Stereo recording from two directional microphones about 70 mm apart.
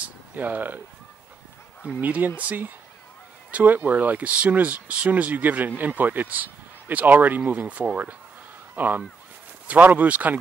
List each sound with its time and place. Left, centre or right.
0.4 s speech: right
2.0 s speech: right